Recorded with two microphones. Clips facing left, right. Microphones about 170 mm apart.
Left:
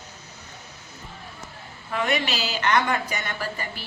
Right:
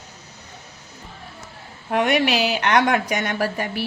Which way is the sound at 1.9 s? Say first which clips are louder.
Right 7 dB; 65° right (ahead or behind).